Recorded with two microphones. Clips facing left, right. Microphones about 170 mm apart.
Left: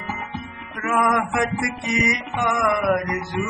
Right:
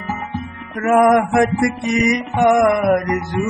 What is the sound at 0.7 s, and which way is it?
Music, 45° right (ahead or behind).